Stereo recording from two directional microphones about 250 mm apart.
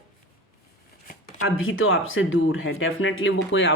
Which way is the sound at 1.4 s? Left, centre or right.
Left.